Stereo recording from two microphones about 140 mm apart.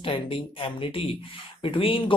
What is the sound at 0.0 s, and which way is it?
Speech, 40° left (ahead or behind).